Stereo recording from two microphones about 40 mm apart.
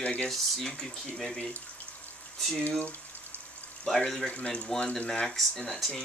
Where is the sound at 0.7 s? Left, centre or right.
Centre.